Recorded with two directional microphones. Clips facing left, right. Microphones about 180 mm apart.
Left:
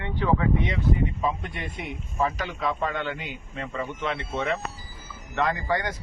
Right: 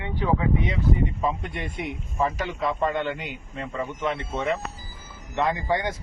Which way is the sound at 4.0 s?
10° right (ahead or behind).